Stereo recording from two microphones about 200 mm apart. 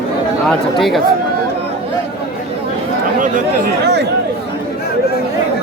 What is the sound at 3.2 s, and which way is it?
Speech, 45° right (ahead or behind).